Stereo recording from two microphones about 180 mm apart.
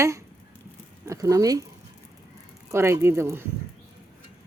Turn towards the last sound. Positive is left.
turn(degrees=-15)  # may be behind; listen again after turning